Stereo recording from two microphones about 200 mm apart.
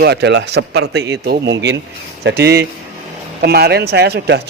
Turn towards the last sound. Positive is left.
turn(degrees=-55)  # may be behind; listen again after turning